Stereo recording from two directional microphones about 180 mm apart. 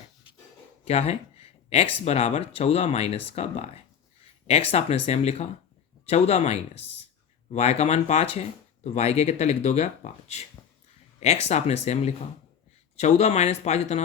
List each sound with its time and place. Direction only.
0.9 s speech: 35° left (ahead or behind)